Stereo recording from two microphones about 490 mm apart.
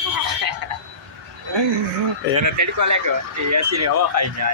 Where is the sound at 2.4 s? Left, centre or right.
Right.